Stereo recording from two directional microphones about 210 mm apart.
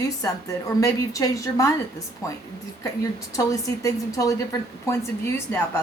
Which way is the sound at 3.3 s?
15° left (ahead or behind).